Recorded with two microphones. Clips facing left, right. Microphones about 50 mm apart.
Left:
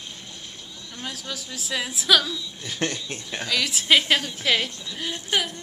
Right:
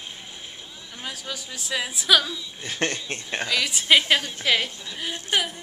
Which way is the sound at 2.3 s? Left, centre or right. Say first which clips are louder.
Even; centre.